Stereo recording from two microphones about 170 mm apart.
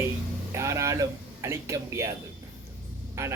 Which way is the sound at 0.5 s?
15° right (ahead or behind).